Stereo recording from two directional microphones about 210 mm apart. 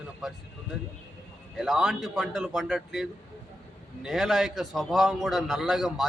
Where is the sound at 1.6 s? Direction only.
5° right (ahead or behind).